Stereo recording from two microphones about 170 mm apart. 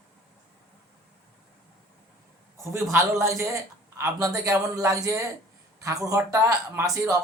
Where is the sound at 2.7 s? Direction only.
15° right (ahead or behind).